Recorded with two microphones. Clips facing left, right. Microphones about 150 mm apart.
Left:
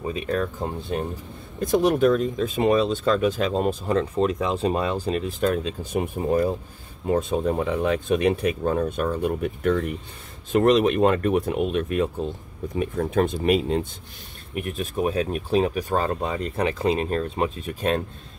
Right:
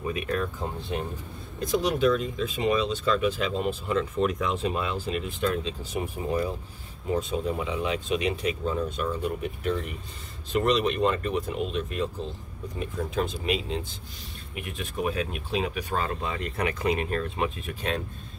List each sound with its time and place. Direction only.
0.0 s speech: 35° left (ahead or behind)
1.6 s speech: 50° left (ahead or behind); by 17.5 s 35° left (ahead or behind)